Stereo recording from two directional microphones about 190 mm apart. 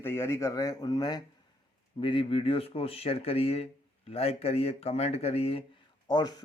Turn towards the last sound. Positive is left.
turn(degrees=20)  # may be behind; listen again after turning